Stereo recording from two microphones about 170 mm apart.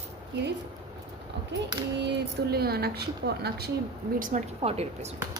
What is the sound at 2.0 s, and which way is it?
A woman's voice, 75° right (ahead or behind).